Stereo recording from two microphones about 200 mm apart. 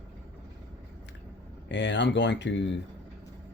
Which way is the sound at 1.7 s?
60° left (ahead or behind).